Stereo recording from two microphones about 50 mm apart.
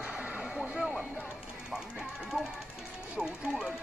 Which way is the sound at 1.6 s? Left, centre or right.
Centre.